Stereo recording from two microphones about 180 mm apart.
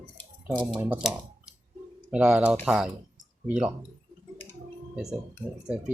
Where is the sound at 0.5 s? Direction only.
20° right (ahead or behind).